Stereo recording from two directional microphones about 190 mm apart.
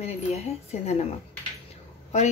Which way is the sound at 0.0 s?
35° left (ahead or behind).